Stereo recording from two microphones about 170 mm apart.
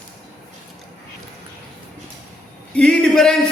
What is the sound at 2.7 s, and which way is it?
Speech, 5° left (ahead or behind).